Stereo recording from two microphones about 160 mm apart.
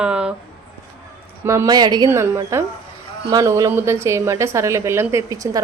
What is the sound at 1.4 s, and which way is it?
A woman's voice, 20° right (ahead or behind).